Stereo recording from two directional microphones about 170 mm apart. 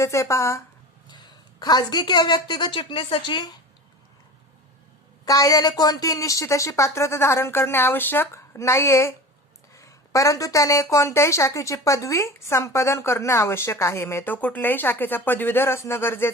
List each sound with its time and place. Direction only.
0.0 s a woman's voice: 15° left (ahead or behind)
5.2 s a woman's voice: 20° left (ahead or behind)